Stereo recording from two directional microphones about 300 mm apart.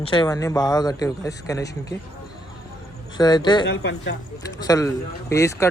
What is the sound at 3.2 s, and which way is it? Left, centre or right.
Speech, centre.